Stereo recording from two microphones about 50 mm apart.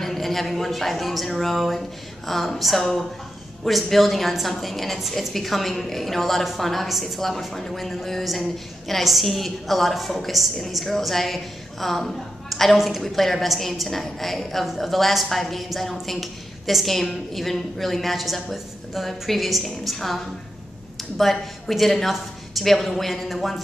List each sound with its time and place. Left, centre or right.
0.0 s a woman's voice: centre
21.2 s a woman's voice: centre